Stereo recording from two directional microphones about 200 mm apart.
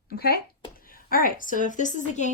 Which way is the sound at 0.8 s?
45° left (ahead or behind).